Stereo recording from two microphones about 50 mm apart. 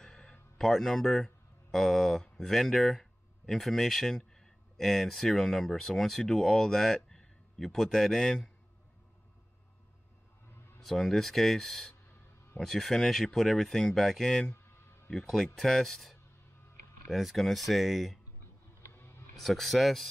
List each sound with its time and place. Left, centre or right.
0.0 s a sound: centre
0.6 s speech: centre
10.8 s speech: centre
14.2 s speech: centre
15.2 s speech: centre
18.9 s a sound: left
19.4 s speech: centre